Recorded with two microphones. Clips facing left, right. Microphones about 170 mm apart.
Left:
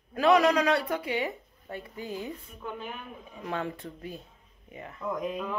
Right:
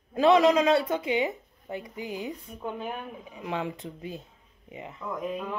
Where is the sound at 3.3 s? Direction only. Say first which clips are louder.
Right 1 dB; 15° right (ahead or behind).